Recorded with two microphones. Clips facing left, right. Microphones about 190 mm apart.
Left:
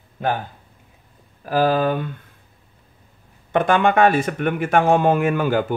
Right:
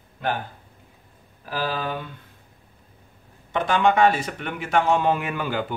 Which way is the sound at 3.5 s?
55° left (ahead or behind).